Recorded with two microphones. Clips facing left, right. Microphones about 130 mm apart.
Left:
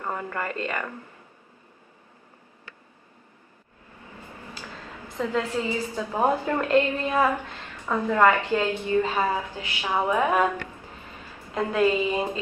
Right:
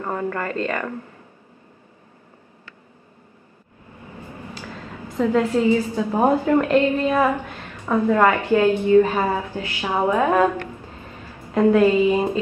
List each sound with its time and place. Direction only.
0.0 s a sound: 15° right (ahead or behind)
0.3 s a woman's voice: 15° left (ahead or behind)
5.1 s a woman's voice: 15° right (ahead or behind)
10.1 s a woman's voice: 15° left (ahead or behind)
11.8 s a woman's voice: 15° right (ahead or behind)